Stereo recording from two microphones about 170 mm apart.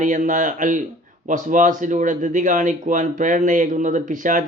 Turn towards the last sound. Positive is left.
turn(degrees=-50)  # may be behind; listen again after turning